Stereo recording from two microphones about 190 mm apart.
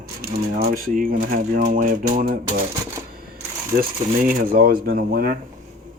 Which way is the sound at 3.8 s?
45° right (ahead or behind).